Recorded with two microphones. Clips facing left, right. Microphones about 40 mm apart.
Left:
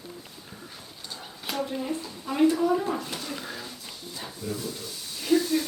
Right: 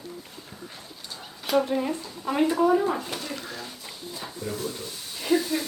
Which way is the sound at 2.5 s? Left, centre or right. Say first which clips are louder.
Right 2 dB; right.